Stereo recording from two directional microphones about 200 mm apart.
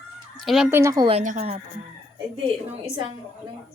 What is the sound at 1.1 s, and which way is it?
Speech, 35° right (ahead or behind).